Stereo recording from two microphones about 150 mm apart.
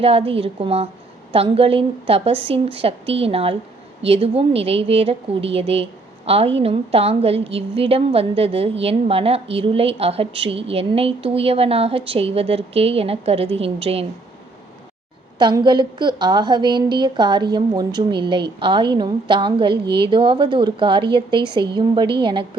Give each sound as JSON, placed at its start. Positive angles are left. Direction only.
{"t": 0.0, "sound": "a woman's voice", "side_deg": -40}
{"t": 15.4, "sound": "a woman's voice", "side_deg": -30}